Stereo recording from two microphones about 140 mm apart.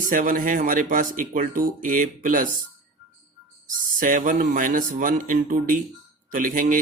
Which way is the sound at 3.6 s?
70° right (ahead or behind).